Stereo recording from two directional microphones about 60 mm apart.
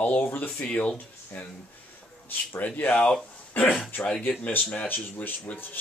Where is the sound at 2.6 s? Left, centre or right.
Left.